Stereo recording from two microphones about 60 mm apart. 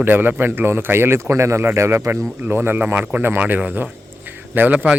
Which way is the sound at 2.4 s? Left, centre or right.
Right.